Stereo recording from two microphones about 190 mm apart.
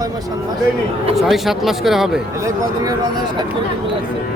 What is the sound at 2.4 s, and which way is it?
Speech, 20° right (ahead or behind).